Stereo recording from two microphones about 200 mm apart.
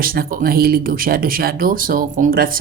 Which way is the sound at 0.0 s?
45° right (ahead or behind).